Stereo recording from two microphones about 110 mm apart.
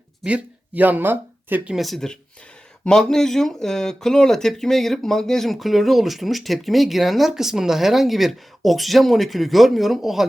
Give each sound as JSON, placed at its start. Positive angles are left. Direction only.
{"t": 0.3, "sound": "speech", "side_deg": -10}
{"t": 1.7, "sound": "speech", "side_deg": 0}